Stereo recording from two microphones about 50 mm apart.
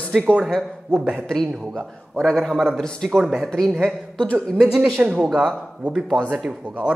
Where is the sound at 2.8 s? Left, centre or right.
Centre.